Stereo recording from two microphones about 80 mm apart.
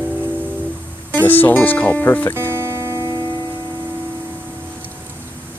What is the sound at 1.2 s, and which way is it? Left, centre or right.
Speech, left.